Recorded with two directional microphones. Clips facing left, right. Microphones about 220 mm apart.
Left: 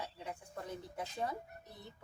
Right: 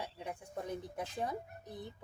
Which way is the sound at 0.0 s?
15° right (ahead or behind).